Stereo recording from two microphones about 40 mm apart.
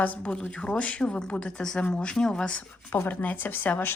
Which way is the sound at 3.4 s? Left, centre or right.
Left.